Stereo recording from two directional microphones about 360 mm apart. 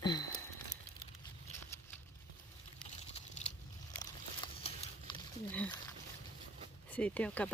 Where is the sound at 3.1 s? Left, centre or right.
Centre.